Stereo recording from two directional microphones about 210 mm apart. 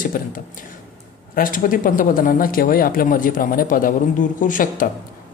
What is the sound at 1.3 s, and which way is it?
Speech, 40° left (ahead or behind).